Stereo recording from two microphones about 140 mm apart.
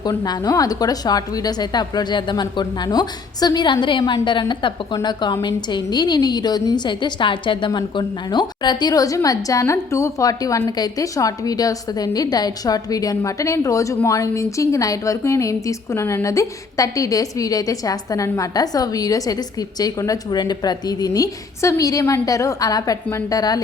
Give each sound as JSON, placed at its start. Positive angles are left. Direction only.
{"t": 0.0, "sound": "a woman's voice", "side_deg": 25}